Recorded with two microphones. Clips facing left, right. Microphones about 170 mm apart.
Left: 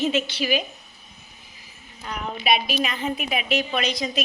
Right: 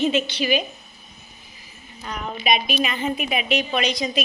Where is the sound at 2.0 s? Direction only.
5° left (ahead or behind).